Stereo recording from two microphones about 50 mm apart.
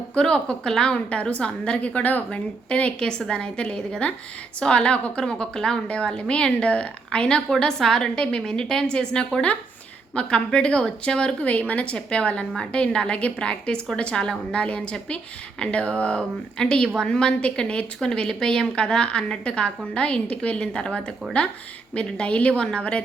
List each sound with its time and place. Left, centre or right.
0.2 s a woman's voice: centre
11.7 s a woman's voice: left